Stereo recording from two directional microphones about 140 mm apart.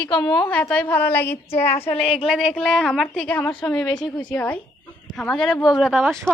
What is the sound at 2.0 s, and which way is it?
A woman's voice, 5° left (ahead or behind).